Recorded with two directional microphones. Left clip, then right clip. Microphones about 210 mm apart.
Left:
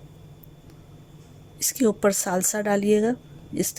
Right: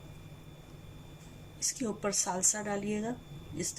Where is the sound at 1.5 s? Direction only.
55° left (ahead or behind).